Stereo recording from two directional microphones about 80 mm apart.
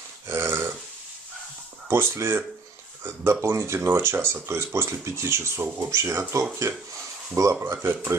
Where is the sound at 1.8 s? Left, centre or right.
Right.